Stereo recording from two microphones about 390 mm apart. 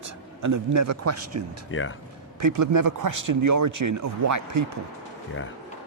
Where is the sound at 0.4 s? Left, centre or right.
Right.